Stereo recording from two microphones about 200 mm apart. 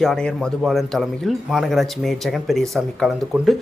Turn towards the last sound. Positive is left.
turn(degrees=0)  # may be behind; listen again after turning